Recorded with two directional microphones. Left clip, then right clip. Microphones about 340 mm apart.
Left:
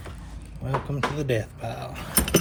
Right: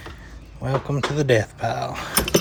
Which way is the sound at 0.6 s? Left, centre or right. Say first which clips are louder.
Right 3 dB; centre.